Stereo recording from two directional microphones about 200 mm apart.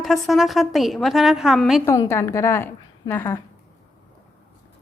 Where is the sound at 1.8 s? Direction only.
10° left (ahead or behind).